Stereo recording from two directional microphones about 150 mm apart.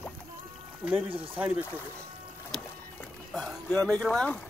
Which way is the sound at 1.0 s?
40° right (ahead or behind).